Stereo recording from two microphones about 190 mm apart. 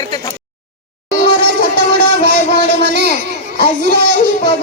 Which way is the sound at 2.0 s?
60° right (ahead or behind).